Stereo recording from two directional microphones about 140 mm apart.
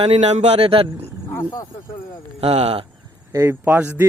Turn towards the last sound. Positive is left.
turn(degrees=-15)  # may be behind; listen again after turning